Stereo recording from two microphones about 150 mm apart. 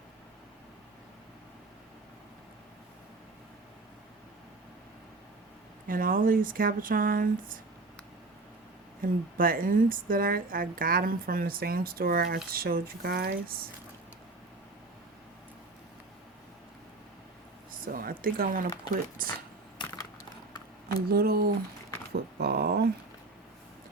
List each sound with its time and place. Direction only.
5.9 s a woman's voice: 70° right (ahead or behind)
9.0 s a woman's voice: 70° right (ahead or behind); by 13.6 s 90° right
17.8 s a woman's voice: 70° right (ahead or behind)
21.1 s speech: 90° right